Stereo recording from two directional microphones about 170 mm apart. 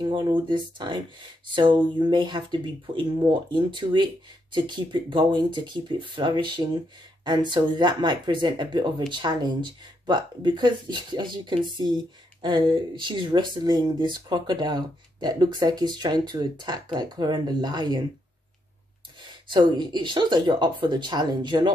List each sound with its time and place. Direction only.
0.0 s speech: 25° right (ahead or behind)
19.2 s speech: 25° right (ahead or behind)